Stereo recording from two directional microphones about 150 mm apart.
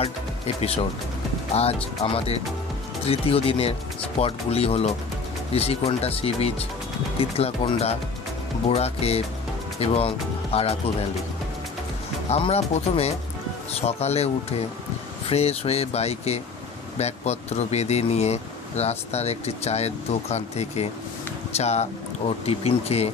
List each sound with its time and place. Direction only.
1.5 s speech: 40° left (ahead or behind)
12.3 s speech: 45° left (ahead or behind)